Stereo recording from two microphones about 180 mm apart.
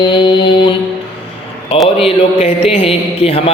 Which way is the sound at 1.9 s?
35° left (ahead or behind).